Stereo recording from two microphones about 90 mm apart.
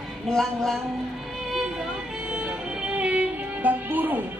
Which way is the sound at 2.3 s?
10° right (ahead or behind).